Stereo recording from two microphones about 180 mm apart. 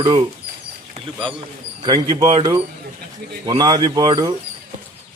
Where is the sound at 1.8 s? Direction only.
25° right (ahead or behind).